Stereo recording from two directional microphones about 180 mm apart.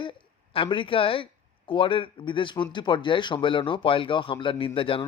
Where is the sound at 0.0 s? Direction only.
30° left (ahead or behind).